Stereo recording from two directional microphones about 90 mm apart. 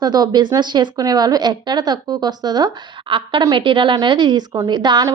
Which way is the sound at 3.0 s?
70° right (ahead or behind).